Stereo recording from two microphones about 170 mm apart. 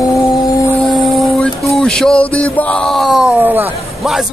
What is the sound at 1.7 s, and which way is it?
A man's voice, 5° left (ahead or behind).